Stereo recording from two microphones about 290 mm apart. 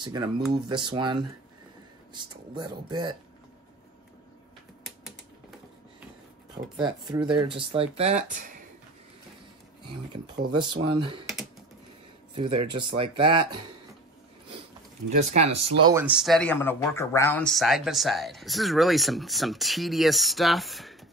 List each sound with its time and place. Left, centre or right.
0.0 s speech: centre
6.8 s speech: centre
10.5 s speech: centre
12.4 s speech: centre
15.0 s speech: right
15.9 s speech: centre